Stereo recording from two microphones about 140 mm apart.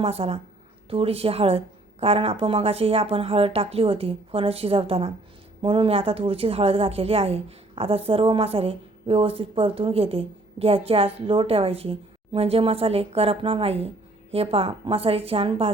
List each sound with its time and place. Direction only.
0.0 s a woman's voice: 45° right (ahead or behind)